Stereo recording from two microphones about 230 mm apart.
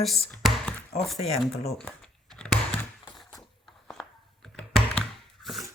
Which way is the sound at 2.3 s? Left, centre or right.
Centre.